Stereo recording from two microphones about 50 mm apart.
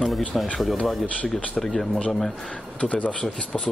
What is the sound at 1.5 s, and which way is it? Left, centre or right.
Speech, centre.